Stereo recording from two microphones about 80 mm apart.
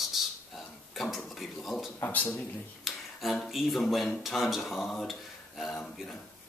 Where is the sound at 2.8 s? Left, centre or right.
Centre.